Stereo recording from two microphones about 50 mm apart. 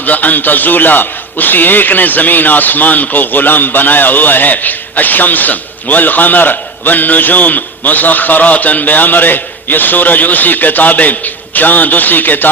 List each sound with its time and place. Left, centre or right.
0.0 s a man's voice: left